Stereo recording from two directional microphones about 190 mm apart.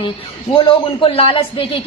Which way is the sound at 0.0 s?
30° left (ahead or behind).